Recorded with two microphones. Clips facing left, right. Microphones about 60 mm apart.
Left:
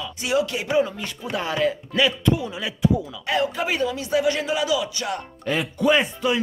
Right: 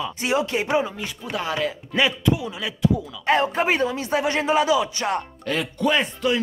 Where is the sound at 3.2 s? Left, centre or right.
Right.